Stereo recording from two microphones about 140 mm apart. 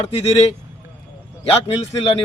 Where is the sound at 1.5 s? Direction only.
45° left (ahead or behind).